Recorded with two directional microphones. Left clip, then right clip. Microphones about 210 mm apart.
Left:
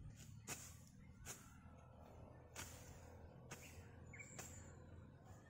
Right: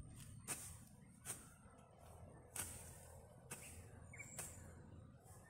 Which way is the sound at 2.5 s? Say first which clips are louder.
Right 3 dB; 45° right (ahead or behind).